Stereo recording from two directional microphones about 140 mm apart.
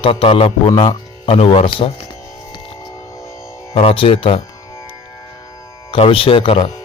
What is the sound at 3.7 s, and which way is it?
Speech, 40° left (ahead or behind).